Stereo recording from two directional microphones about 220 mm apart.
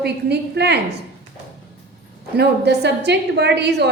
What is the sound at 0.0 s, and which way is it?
Speech, 50° right (ahead or behind).